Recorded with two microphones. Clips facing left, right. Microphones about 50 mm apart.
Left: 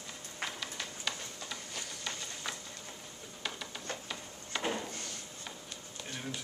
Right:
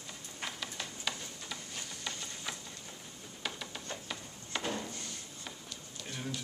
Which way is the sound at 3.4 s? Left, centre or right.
Centre.